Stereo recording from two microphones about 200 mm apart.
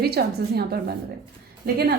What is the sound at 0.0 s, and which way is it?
Speech, 50° right (ahead or behind).